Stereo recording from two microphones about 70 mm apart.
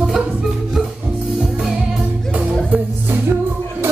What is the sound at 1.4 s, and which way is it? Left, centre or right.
Music, centre.